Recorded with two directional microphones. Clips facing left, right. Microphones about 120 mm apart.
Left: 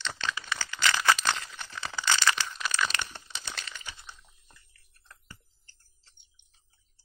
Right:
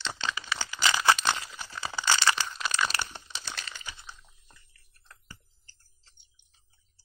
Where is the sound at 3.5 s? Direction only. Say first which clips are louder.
Right 1 dB; 40° right (ahead or behind).